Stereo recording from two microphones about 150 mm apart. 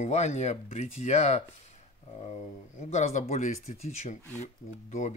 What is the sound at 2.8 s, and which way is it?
Speech, 50° left (ahead or behind).